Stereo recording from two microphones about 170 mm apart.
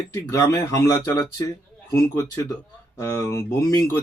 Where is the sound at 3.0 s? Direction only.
15° left (ahead or behind).